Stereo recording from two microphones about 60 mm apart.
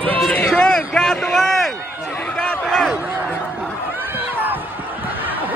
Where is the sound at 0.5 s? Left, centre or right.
Centre.